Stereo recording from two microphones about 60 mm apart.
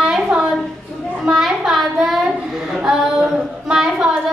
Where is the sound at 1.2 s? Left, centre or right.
Centre.